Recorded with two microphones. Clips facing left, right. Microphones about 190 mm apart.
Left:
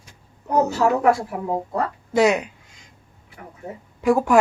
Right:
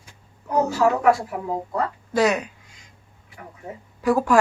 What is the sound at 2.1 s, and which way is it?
Speech, 20° left (ahead or behind).